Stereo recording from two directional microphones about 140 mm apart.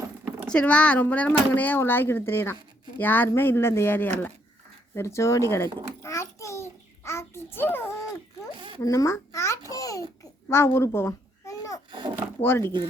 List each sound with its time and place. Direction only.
0.4 s speech: 10° left (ahead or behind)
4.9 s babbling: 20° left (ahead or behind)
11.9 s a sound: 35° right (ahead or behind)
12.4 s speech: 15° left (ahead or behind)